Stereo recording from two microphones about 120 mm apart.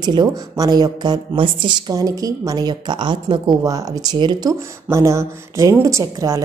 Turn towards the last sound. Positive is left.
turn(degrees=-30)  # may be behind; listen again after turning